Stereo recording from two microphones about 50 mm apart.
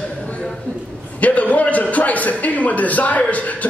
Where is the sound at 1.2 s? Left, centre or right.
Left.